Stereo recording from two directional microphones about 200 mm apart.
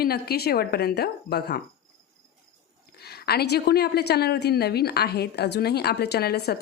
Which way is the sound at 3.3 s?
55° left (ahead or behind).